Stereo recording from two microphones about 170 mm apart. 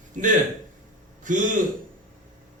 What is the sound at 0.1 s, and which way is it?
A man's voice, 50° right (ahead or behind).